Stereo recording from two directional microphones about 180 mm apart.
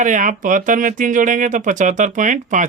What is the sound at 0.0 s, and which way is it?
Speech, 45° right (ahead or behind).